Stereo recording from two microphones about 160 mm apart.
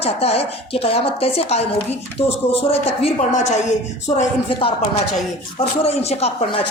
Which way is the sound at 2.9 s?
45° left (ahead or behind).